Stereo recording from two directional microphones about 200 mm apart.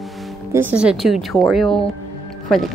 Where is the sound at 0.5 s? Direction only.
10° right (ahead or behind).